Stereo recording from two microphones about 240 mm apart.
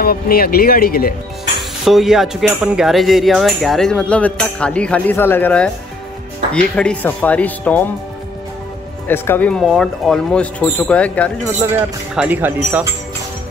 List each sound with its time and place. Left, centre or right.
0.0 s speech: left
1.9 s speech: centre
9.0 s speech: centre
11.7 s speech: centre